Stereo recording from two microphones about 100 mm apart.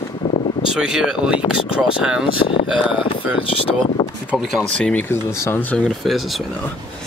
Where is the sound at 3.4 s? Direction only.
70° left (ahead or behind).